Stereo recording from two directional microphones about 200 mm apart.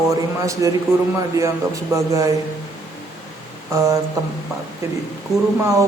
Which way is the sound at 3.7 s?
15° right (ahead or behind).